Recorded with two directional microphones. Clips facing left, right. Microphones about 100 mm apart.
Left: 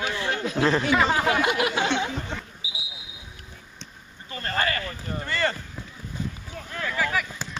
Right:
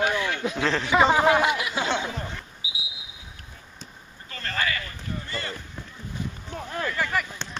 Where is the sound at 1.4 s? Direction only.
65° left (ahead or behind).